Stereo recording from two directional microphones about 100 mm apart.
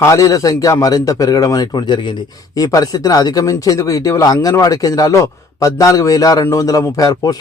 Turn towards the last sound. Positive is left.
turn(degrees=35)  # may be behind; listen again after turning